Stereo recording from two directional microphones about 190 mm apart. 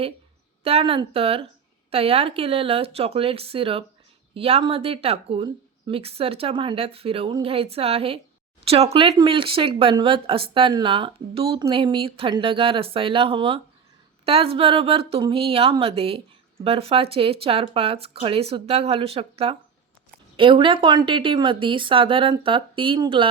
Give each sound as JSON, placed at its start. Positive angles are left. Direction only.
{"t": 0.6, "sound": "speech", "side_deg": -30}